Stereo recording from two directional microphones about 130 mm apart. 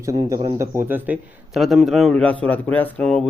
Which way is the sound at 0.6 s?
20° right (ahead or behind).